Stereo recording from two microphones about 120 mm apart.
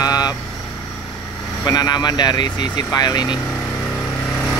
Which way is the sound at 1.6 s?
35° left (ahead or behind).